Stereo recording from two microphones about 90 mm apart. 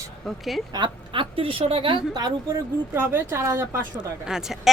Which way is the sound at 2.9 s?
25° right (ahead or behind).